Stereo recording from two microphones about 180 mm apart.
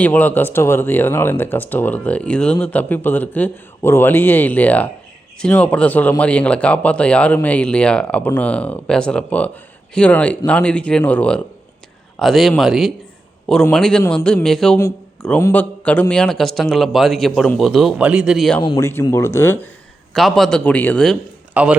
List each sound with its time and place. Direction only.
0.0 s a man's voice: 10° left (ahead or behind)
14.0 s speech: 15° left (ahead or behind)
14.3 s a man's voice: 5° left (ahead or behind)
18.8 s speech: 15° left (ahead or behind)
20.1 s a man's voice: centre (ahead or behind)
21.5 s a man's voice: 5° right (ahead or behind)